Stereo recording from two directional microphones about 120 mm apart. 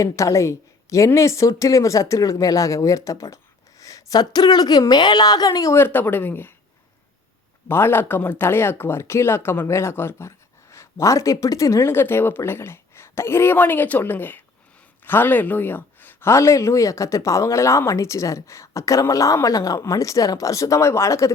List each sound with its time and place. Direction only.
0.0 s speech: 25° left (ahead or behind)
5.7 s speech: 15° left (ahead or behind)
7.7 s speech: 20° left (ahead or behind)